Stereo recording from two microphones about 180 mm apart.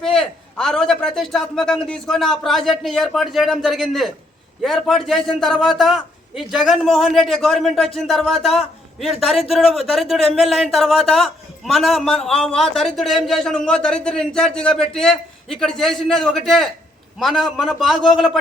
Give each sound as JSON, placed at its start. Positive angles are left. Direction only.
{"t": 0.0, "sound": "speech", "side_deg": 5}